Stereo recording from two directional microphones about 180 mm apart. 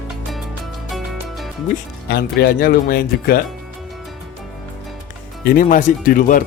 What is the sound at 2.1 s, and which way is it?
Speech, 60° left (ahead or behind).